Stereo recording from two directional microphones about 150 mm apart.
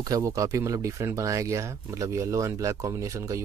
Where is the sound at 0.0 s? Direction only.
20° right (ahead or behind).